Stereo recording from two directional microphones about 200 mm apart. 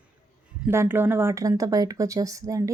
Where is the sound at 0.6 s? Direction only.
10° right (ahead or behind).